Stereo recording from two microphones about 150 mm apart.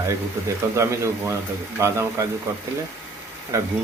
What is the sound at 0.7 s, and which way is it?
Speech, 20° right (ahead or behind).